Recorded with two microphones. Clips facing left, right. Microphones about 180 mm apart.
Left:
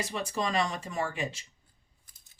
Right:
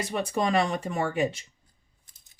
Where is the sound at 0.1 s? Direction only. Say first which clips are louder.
Right 9 dB; 55° right (ahead or behind).